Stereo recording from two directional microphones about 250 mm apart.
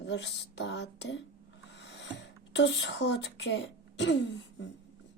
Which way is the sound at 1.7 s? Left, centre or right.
Left.